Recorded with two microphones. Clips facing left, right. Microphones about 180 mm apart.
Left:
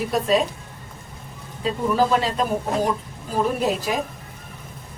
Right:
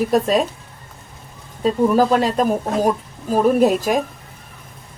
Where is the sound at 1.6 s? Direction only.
45° right (ahead or behind).